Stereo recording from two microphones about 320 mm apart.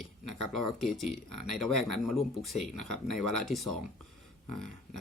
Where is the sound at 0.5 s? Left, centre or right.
Centre.